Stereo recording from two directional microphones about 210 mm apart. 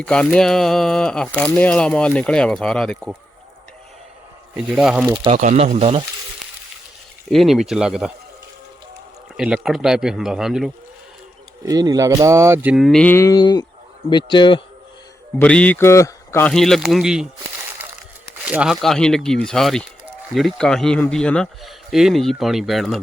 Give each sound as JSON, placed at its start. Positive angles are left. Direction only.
{"t": 0.0, "sound": "speech", "side_deg": 5}
{"t": 4.5, "sound": "speech", "side_deg": -5}
{"t": 5.0, "sound": "speech", "side_deg": -25}
{"t": 7.3, "sound": "speech", "side_deg": 0}
{"t": 9.4, "sound": "speech", "side_deg": 0}
{"t": 11.6, "sound": "cattle", "side_deg": -15}
{"t": 14.1, "sound": "speech", "side_deg": 20}
{"t": 15.4, "sound": "a man's voice", "side_deg": 5}
{"t": 16.5, "sound": "speech", "side_deg": 0}
{"t": 18.4, "sound": "speech", "side_deg": -5}